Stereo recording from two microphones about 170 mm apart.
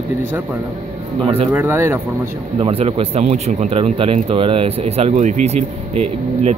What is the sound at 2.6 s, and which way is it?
Speech, 35° right (ahead or behind).